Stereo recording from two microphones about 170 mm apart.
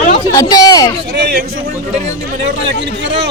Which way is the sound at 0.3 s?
20° left (ahead or behind).